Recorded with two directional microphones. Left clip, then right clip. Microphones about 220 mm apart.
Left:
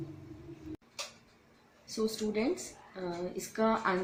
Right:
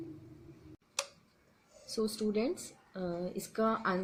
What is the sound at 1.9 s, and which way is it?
Speech, 35° right (ahead or behind).